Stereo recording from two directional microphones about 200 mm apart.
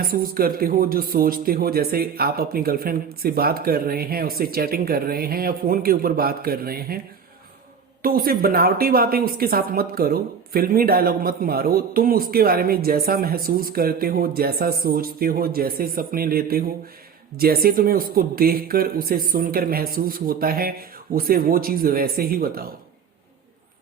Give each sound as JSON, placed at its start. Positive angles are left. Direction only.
{"t": 0.1, "sound": "speech", "side_deg": -45}
{"t": 8.0, "sound": "speech", "side_deg": -45}